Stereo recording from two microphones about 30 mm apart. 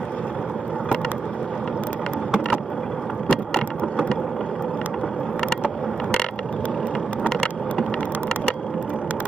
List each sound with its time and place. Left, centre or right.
3.3 s vehicle: left